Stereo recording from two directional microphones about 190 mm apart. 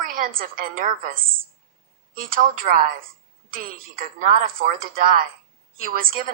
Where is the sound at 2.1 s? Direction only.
50° right (ahead or behind).